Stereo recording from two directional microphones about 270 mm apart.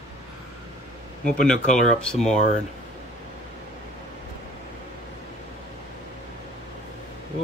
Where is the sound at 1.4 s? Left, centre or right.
Centre.